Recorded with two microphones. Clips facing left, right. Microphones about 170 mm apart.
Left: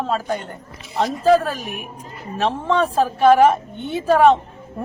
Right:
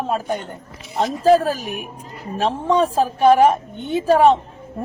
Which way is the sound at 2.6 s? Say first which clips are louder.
Right 2 dB; 15° right (ahead or behind).